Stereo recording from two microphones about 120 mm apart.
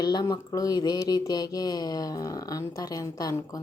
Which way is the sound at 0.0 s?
35° left (ahead or behind).